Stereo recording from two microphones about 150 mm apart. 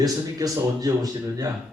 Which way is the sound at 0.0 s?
25° right (ahead or behind).